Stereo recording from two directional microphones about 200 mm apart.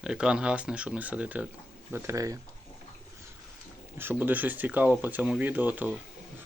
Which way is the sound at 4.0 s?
10° right (ahead or behind).